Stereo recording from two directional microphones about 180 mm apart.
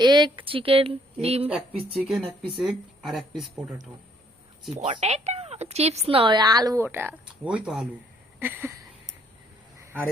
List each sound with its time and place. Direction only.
0.0 s speech: 25° right (ahead or behind)
2.0 s speech: centre (ahead or behind)
4.7 s speech: 40° right (ahead or behind); by 7.9 s 5° right (ahead or behind)
8.4 s a sound: 10° right (ahead or behind)